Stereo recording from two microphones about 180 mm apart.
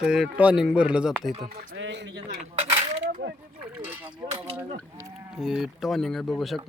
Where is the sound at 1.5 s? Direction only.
90° right.